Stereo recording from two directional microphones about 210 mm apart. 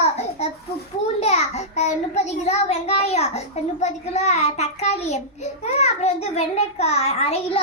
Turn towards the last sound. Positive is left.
turn(degrees=30)  # may be behind; listen again after turning